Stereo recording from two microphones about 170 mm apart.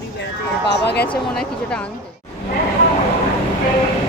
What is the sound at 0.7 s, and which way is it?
Speech, 85° left.